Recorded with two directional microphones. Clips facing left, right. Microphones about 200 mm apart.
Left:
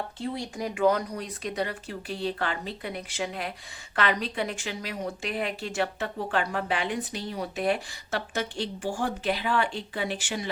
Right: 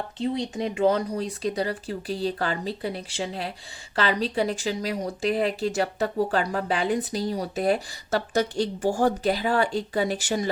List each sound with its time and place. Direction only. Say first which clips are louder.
0.2 s speech: right 7 dB; 20° right (ahead or behind); by 10.5 s 40° right (ahead or behind)